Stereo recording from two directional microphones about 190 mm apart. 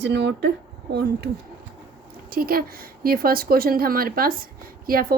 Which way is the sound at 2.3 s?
50° right (ahead or behind).